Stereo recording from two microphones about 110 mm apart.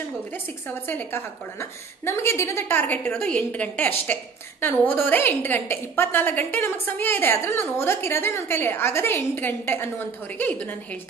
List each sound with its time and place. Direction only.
0.3 s a woman's voice: 15° left (ahead or behind)